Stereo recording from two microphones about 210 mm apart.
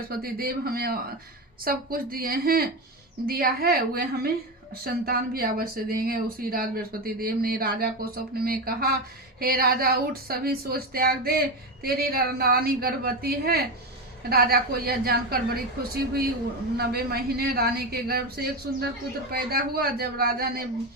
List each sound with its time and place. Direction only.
0.1 s speech: 45° right (ahead or behind)